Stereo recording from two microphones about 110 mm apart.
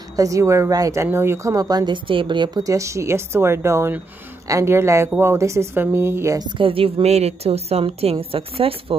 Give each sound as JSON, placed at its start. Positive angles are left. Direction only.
{"t": 0.1, "sound": "a woman's voice", "side_deg": -30}
{"t": 2.0, "sound": "a woman's voice", "side_deg": -50}
{"t": 2.6, "sound": "speech", "side_deg": -30}
{"t": 6.6, "sound": "a woman's voice", "side_deg": -60}